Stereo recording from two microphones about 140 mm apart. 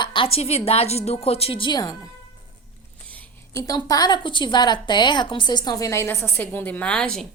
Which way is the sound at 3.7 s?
30° left (ahead or behind).